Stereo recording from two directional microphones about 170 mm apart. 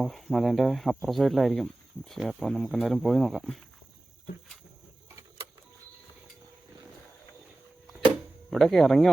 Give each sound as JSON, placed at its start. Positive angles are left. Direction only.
{"t": 0.0, "sound": "speech", "side_deg": 0}
{"t": 8.4, "sound": "speech", "side_deg": 0}